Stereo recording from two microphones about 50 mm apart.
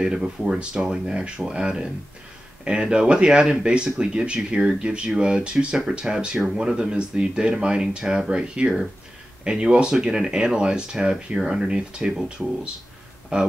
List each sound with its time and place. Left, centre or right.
0.0 s speech: centre